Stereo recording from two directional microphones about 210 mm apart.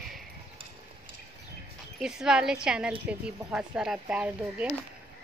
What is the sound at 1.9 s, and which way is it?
A woman's voice, 5° right (ahead or behind).